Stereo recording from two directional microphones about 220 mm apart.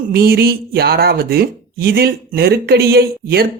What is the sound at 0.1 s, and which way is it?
Speech, 45° right (ahead or behind).